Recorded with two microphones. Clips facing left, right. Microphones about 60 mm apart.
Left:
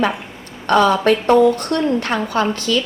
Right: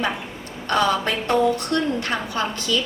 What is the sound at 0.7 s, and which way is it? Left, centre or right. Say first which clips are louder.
A woman's voice: left 7 dB; left.